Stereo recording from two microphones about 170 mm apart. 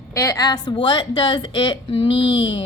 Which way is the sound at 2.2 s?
90° left.